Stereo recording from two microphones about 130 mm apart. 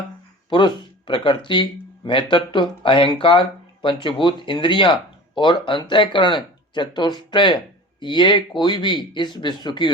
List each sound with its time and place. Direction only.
0.5 s speech: 35° left (ahead or behind)